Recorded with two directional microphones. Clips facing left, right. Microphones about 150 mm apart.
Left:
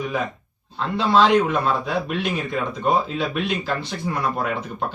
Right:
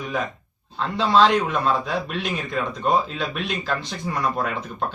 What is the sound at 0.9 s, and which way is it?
Speech, 55° left (ahead or behind).